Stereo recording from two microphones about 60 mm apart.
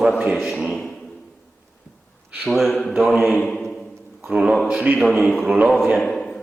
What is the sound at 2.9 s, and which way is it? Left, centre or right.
Speech, centre.